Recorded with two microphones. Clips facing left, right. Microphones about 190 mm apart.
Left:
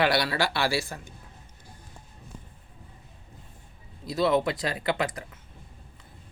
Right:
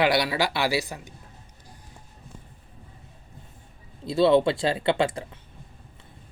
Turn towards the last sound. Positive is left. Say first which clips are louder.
# right 5 dB
turn(degrees=-30)  # may be behind; listen again after turning